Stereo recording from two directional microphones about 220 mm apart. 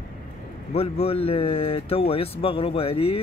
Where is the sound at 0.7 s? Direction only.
25° left (ahead or behind).